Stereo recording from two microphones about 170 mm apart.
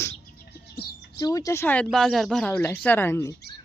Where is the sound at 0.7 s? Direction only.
70° left (ahead or behind).